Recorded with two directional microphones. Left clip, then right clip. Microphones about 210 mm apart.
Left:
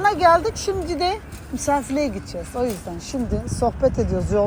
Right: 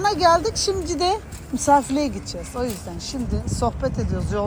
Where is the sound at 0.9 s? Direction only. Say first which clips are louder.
Right 1 dB; 5° right (ahead or behind).